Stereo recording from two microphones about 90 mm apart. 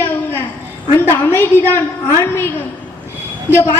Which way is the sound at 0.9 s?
25° left (ahead or behind).